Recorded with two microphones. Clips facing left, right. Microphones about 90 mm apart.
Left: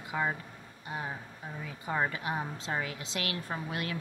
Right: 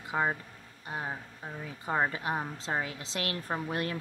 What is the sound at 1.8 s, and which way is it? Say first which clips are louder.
A woman's voice: right 2 dB; 30° right (ahead or behind).